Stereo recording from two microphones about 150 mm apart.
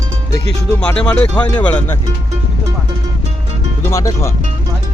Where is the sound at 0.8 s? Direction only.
10° left (ahead or behind).